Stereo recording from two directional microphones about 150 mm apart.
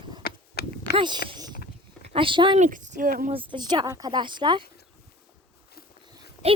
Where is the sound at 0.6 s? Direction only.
90° left.